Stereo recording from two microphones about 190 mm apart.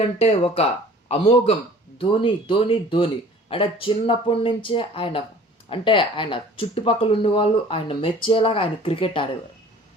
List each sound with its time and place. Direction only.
0.0 s speech: 30° left (ahead or behind)